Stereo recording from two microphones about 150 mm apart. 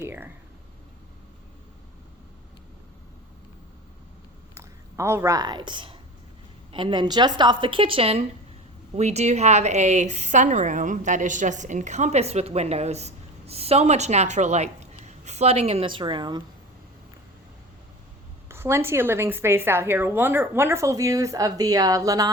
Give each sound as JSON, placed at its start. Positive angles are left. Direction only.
{"t": 0.0, "sound": "a sound", "side_deg": -15}
{"t": 4.5, "sound": "a woman's voice", "side_deg": -15}
{"t": 18.4, "sound": "a woman's voice", "side_deg": -15}